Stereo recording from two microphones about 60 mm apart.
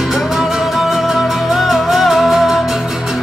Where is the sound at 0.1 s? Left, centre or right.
Centre.